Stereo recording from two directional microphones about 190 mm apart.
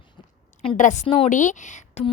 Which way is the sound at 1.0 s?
30° left (ahead or behind).